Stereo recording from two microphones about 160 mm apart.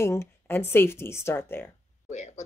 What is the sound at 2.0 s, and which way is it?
Speech, 50° left (ahead or behind).